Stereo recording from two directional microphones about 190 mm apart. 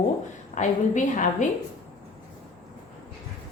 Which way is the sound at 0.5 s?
40° left (ahead or behind).